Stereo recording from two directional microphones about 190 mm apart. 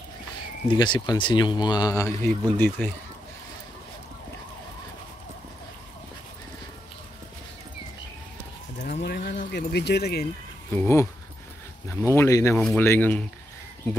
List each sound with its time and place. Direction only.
0.7 s speech: 25° left (ahead or behind); by 2.9 s 10° left (ahead or behind)
9.0 s a sound: 60° left (ahead or behind)
10.8 s speech: 15° left (ahead or behind)
12.5 s speech: centre (ahead or behind)